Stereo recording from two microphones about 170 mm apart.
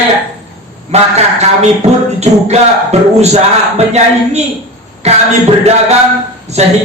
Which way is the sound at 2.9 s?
40° right (ahead or behind).